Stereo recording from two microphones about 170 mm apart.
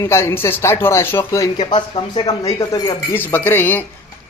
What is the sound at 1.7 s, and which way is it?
A man's voice, 25° left (ahead or behind).